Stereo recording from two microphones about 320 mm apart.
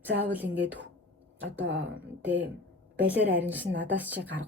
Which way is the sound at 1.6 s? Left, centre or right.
Right.